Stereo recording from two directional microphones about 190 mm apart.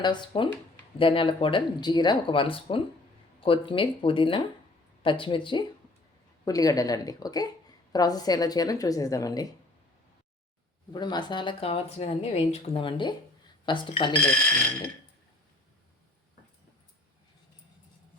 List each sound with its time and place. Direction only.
0.0 s speech: 25° left (ahead or behind)
10.9 s speech: 20° left (ahead or behind)